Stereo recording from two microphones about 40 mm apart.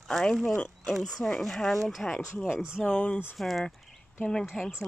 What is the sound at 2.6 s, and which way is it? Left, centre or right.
Speech, right.